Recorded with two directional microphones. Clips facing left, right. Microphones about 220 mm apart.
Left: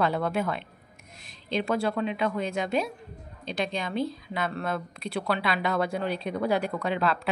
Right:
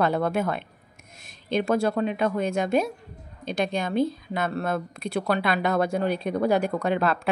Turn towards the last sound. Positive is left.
turn(degrees=-50)  # may be behind; listen again after turning